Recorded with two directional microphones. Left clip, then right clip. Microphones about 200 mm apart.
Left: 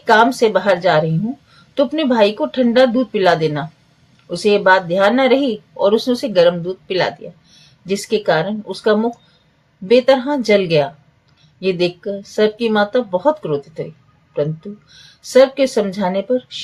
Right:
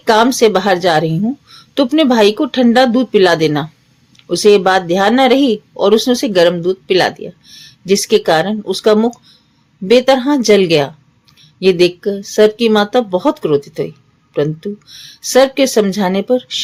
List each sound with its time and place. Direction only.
0.0 s speech: 50° right (ahead or behind)